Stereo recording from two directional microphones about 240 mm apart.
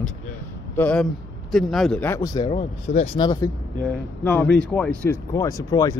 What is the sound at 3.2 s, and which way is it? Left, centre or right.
Speech, centre.